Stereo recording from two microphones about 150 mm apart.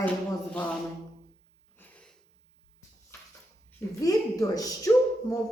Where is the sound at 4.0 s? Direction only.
25° left (ahead or behind).